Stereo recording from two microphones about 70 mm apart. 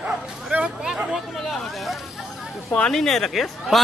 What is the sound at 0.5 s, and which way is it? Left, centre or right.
Hubbub, right.